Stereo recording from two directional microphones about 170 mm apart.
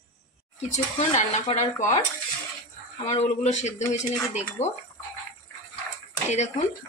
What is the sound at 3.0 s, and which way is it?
Speech, 40° left (ahead or behind).